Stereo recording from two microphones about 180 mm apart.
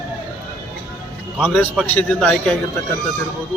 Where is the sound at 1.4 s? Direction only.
5° left (ahead or behind).